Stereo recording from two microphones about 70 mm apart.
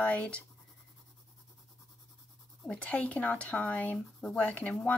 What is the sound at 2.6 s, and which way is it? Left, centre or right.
Speech, centre.